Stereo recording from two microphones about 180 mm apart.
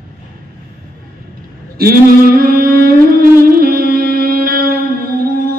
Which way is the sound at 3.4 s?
55° right (ahead or behind).